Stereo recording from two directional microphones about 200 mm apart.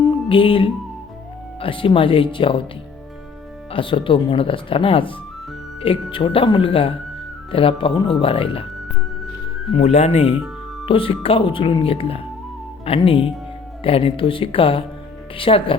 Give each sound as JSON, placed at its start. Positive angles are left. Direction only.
{"t": 0.0, "sound": "music", "side_deg": 25}
{"t": 1.5, "sound": "speech", "side_deg": 25}
{"t": 3.7, "sound": "speech", "side_deg": 25}
{"t": 9.7, "sound": "speech", "side_deg": 35}